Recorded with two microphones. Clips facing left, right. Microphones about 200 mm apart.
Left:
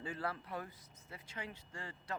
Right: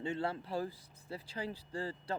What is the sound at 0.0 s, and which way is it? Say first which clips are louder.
Speech: right 5 dB; 25° right (ahead or behind).